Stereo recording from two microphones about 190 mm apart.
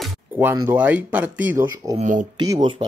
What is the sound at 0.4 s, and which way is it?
Speech, 10° right (ahead or behind).